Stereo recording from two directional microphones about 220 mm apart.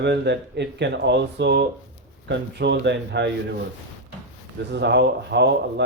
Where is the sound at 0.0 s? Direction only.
50° right (ahead or behind).